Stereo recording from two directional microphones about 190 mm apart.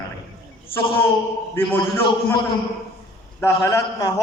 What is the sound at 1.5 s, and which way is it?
Speech, 10° left (ahead or behind).